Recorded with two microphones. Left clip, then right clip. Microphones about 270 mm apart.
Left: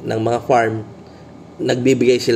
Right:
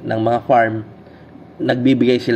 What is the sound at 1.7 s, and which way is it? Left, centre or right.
Speech, right.